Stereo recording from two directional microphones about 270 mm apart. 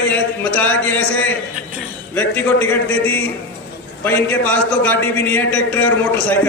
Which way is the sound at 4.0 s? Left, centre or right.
Centre.